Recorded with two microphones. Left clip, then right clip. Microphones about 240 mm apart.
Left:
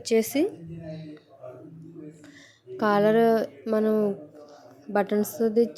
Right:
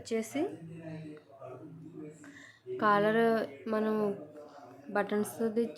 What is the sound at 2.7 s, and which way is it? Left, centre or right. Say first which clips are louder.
A woman's voice: left 6 dB; left.